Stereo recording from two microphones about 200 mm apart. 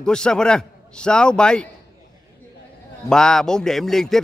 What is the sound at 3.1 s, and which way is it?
A man's voice, 5° left (ahead or behind).